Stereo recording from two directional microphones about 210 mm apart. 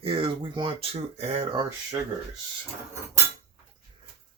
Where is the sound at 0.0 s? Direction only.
25° right (ahead or behind).